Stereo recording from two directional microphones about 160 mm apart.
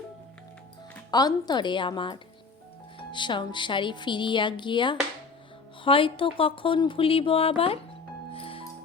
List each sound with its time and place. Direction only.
1.1 s a woman's voice: 25° left (ahead or behind)
8.3 s music: 35° left (ahead or behind)